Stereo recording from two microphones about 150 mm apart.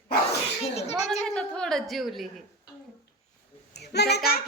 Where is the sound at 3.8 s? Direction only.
90° left.